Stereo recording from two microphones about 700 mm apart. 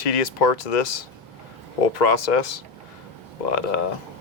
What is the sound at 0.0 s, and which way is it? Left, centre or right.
Speech, left.